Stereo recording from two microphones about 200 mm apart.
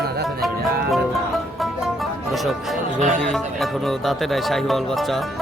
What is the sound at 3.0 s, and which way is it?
Speech, 35° right (ahead or behind).